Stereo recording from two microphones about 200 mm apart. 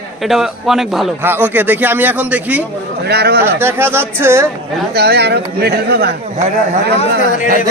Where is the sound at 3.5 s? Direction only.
10° right (ahead or behind).